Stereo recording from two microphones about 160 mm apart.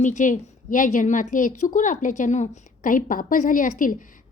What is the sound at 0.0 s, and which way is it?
A woman's voice, 50° left (ahead or behind).